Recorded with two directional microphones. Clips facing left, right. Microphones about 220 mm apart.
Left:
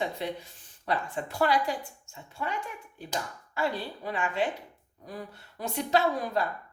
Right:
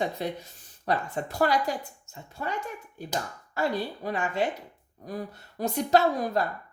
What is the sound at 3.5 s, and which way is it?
A woman's voice, 40° right (ahead or behind).